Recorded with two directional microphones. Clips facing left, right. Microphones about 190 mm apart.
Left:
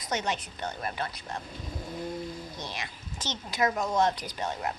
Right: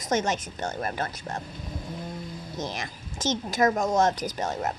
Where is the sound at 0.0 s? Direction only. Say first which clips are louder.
Right 5 dB; 45° right (ahead or behind).